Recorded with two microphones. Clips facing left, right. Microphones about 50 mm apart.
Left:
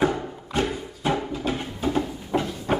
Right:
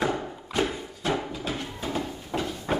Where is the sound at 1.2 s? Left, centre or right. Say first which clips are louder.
Left 5 dB; centre.